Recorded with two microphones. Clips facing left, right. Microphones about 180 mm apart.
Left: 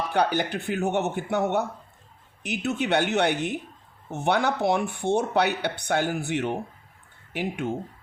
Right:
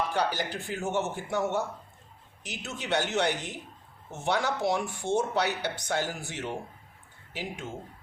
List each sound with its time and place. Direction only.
0.1 s speech: 60° left (ahead or behind)